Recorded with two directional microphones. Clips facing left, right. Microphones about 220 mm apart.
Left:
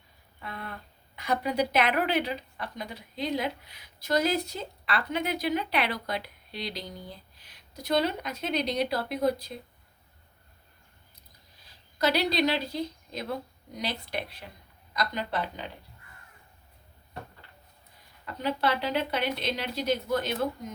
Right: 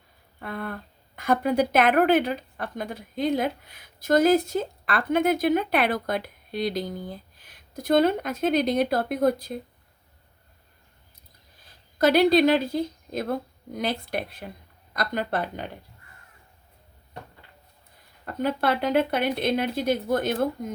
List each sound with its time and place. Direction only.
0.3 s a woman's voice: 50° right (ahead or behind)
11.9 s a woman's voice: 50° right (ahead or behind)
18.3 s a woman's voice: 50° right (ahead or behind)